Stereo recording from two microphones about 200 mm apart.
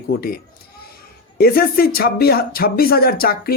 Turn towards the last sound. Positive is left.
turn(degrees=50)  # may be behind; listen again after turning